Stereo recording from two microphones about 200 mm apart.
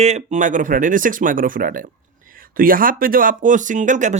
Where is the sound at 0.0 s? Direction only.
35° right (ahead or behind).